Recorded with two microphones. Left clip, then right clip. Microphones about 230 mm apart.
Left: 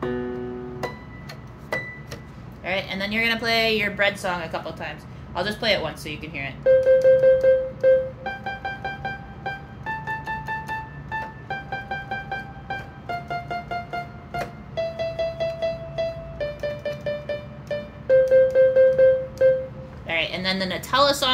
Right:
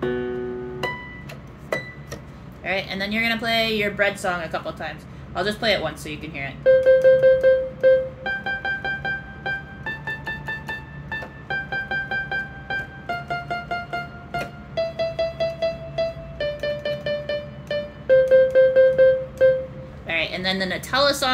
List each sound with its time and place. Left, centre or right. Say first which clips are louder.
0.0 s music: right 3 dB; right
2.6 s speech: right 1 dB; centre
6.6 s music: right 2 dB; right
11.1 s music: right 2 dB; right
20.1 s a sound: right 1 dB; centre